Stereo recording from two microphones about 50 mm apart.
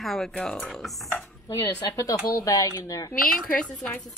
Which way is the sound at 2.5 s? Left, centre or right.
Left.